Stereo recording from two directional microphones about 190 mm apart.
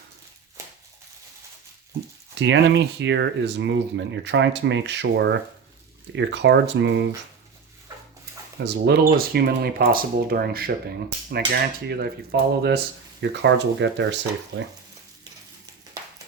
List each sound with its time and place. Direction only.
2.4 s speech: 70° right (ahead or behind)
8.6 s speech: 60° right (ahead or behind)
11.9 s speech: 55° right (ahead or behind)
13.2 s speech: 70° right (ahead or behind)